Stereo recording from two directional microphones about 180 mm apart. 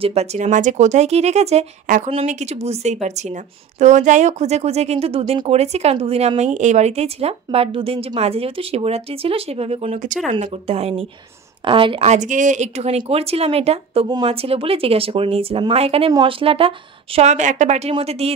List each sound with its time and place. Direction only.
0.0 s speech: 35° right (ahead or behind)